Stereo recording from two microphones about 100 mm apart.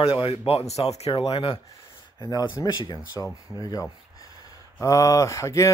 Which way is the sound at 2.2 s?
40° left (ahead or behind).